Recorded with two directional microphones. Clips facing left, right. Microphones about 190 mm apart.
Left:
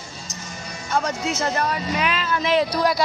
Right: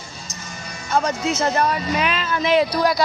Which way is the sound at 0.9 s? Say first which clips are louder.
Right 3 dB; 20° right (ahead or behind).